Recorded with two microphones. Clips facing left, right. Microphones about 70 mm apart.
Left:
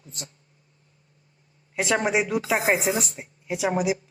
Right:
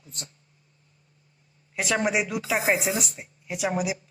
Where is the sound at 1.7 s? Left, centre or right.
Left.